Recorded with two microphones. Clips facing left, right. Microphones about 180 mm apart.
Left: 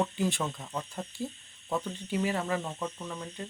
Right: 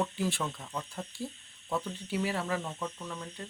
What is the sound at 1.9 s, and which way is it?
Speech, 5° right (ahead or behind).